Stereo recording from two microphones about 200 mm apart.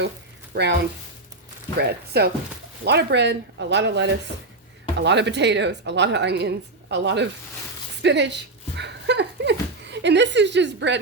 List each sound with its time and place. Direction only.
0.5 s a woman's voice: 55° right (ahead or behind)
1.8 s a woman's voice: 55° right (ahead or behind)
8.0 s a sound: 60° right (ahead or behind)